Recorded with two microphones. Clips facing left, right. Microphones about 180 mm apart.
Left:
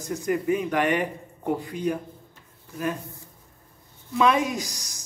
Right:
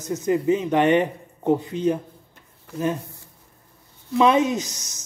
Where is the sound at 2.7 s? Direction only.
75° right (ahead or behind).